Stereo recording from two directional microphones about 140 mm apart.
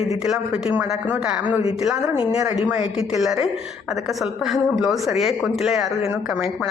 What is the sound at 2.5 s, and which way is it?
Speech, 10° right (ahead or behind).